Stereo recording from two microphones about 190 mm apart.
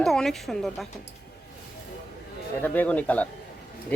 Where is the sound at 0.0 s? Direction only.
Centre (ahead or behind).